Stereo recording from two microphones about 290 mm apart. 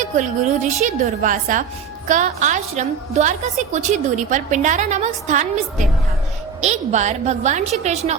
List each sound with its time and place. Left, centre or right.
0.0 s a woman's voice: right